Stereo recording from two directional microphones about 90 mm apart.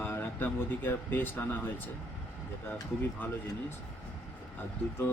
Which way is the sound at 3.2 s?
25° left (ahead or behind).